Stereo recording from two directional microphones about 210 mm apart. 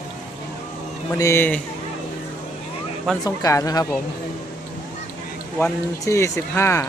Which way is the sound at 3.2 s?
15° left (ahead or behind).